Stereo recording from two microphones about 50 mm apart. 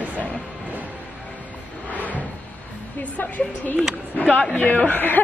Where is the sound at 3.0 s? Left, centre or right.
Left.